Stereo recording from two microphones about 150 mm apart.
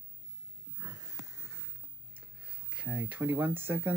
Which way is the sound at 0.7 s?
25° right (ahead or behind).